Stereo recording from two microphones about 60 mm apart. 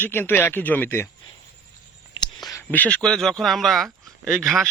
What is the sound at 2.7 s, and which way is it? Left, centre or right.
A man's voice, left.